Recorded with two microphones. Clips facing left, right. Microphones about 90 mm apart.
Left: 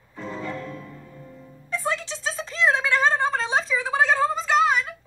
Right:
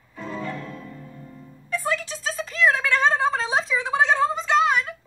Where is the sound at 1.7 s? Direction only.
30° left (ahead or behind).